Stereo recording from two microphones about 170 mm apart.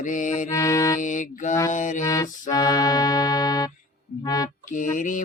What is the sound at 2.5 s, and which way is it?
Music, 20° left (ahead or behind).